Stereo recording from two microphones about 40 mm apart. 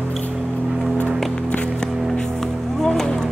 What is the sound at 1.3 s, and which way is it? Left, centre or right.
Music, left.